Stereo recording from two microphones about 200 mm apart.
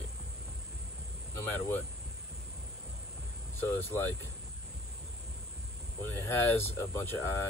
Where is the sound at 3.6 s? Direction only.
10° left (ahead or behind).